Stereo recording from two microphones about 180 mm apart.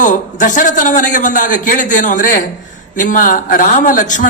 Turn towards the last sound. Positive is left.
turn(degrees=45)  # may be behind; listen again after turning